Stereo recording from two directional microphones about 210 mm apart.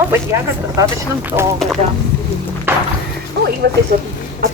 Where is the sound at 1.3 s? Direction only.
30° right (ahead or behind).